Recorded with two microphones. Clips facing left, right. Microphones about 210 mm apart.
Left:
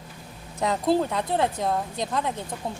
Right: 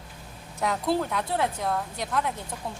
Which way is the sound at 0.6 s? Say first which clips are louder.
Left 3 dB; 20° left (ahead or behind).